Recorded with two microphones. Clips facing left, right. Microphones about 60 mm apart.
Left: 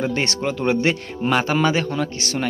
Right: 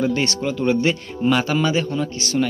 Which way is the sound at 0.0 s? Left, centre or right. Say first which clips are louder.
Right 1 dB; left.